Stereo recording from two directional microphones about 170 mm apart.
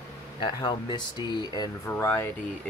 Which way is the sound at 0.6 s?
25° left (ahead or behind).